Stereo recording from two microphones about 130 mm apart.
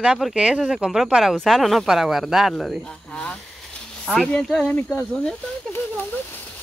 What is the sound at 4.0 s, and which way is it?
Speech, 5° left (ahead or behind).